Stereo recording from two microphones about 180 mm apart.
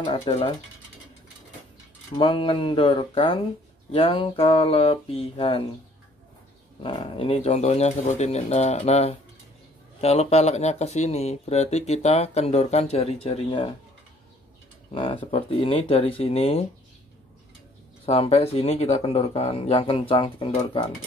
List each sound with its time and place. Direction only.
0.0 s speech: 30° left (ahead or behind)
2.1 s speech: 30° left (ahead or behind)
6.8 s speech: 30° left (ahead or behind)
15.0 s speech: 30° left (ahead or behind)
18.0 s speech: 35° left (ahead or behind)